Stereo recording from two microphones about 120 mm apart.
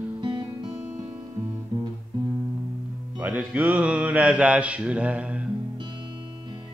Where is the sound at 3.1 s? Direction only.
10° right (ahead or behind).